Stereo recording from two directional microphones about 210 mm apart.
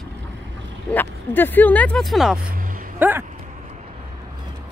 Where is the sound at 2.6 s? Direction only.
40° right (ahead or behind).